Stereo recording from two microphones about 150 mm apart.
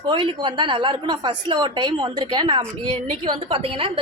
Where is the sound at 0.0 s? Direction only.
35° right (ahead or behind).